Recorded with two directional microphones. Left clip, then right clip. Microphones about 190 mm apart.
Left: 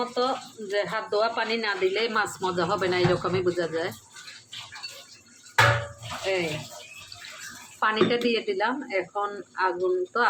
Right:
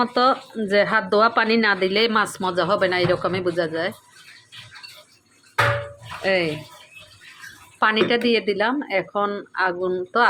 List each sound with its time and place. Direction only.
0.0 s speech: 55° right (ahead or behind); by 3.9 s 35° right (ahead or behind)
7.8 s speech: 35° right (ahead or behind)